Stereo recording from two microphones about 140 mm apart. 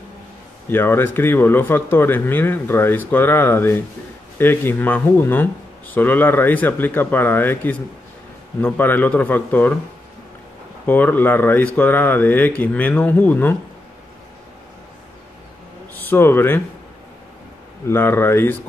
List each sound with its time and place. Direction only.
0.7 s speech: 15° left (ahead or behind)
10.9 s speech: 15° left (ahead or behind)
16.0 s speech: 15° left (ahead or behind)
17.8 s speech: 15° left (ahead or behind)